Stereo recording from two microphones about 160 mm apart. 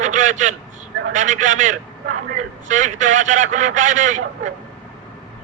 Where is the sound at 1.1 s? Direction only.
50° right (ahead or behind).